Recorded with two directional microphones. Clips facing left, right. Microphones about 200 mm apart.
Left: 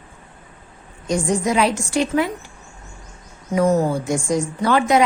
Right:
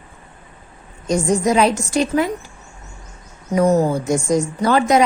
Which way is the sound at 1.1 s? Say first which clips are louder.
Right 3 dB; 40° right (ahead or behind).